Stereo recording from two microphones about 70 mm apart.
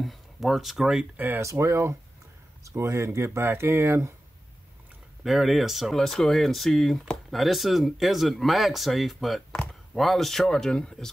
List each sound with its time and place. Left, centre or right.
0.0 s speech: centre
1.1 s speech: right
1.4 s speech: right
5.2 s speech: centre